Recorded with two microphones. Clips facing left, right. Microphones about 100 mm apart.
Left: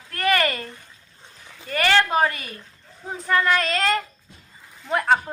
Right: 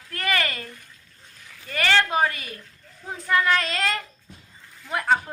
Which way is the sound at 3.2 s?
Centre (ahead or behind).